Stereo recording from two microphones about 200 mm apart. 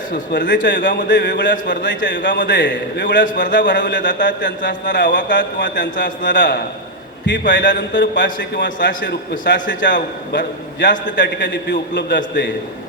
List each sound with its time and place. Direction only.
0.3 s a man's voice: 65° left (ahead or behind)
0.8 s speech: 45° left (ahead or behind)
1.0 s a man's voice: 60° left (ahead or behind)
3.2 s a man's voice: 40° left (ahead or behind)
3.7 s a man's voice: 65° left (ahead or behind)
6.4 s a man's voice: 55° left (ahead or behind)